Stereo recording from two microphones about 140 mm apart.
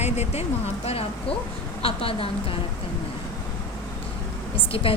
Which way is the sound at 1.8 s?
40° left (ahead or behind).